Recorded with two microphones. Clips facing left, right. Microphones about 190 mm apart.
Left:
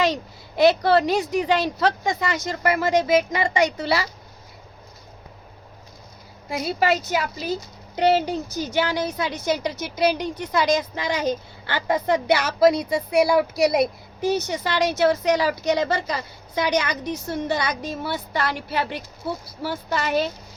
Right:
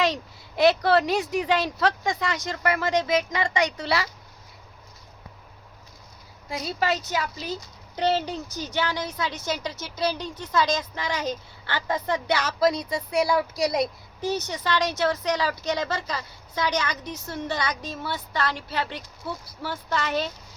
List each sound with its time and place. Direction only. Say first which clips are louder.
0.0 s speech: left 3 dB; centre (ahead or behind)
6.7 s a woman's voice: left 5 dB; 10° left (ahead or behind)